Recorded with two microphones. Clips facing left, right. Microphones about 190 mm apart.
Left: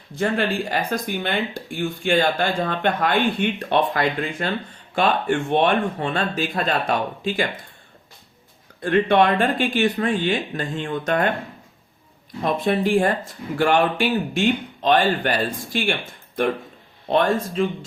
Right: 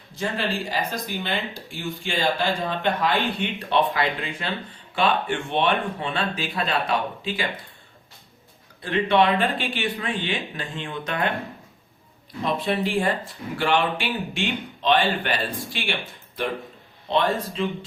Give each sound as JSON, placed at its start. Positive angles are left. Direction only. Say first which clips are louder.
{"t": 0.2, "sound": "speech", "louder": "left 5 dB", "side_deg": 55}
{"t": 8.8, "sound": "speech", "louder": "left 3 dB", "side_deg": 50}
{"t": 12.4, "sound": "speech", "louder": "left 3 dB", "side_deg": 50}